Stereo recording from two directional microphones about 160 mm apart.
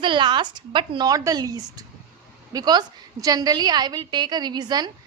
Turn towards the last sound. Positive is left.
turn(degrees=-25)  # may be behind; listen again after turning